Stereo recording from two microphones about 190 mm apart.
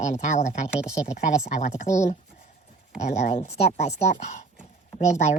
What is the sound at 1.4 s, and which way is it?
Speech, 35° left (ahead or behind).